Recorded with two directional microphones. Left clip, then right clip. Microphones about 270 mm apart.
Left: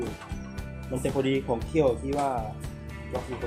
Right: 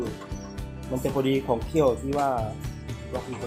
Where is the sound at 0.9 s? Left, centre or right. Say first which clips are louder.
Right 2 dB; right.